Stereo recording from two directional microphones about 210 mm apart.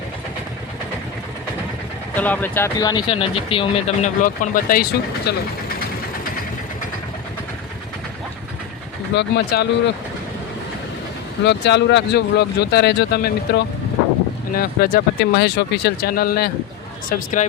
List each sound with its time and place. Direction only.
2.1 s speech: 10° left (ahead or behind); by 5.3 s 45° left (ahead or behind)
9.1 s speech: 50° left (ahead or behind)
11.4 s speech: 55° left (ahead or behind); by 17.4 s 40° left (ahead or behind)